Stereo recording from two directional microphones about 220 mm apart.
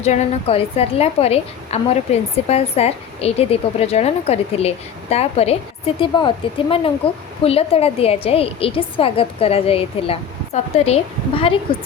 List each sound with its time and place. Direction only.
0.0 s a woman's voice: 30° left (ahead or behind)